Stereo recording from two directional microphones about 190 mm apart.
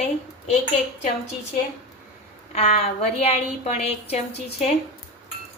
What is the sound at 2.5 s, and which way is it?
A woman's voice, 35° left (ahead or behind).